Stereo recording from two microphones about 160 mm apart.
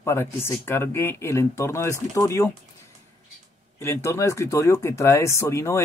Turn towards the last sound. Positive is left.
turn(degrees=15)  # may be behind; listen again after turning